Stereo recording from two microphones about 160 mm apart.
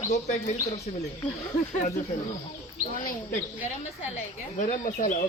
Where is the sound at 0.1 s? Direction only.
50° left (ahead or behind).